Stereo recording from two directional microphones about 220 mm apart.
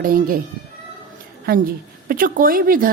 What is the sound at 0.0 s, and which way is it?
Speech, 40° right (ahead or behind).